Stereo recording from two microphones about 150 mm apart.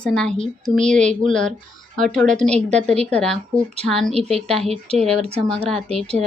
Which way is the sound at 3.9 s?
Centre (ahead or behind).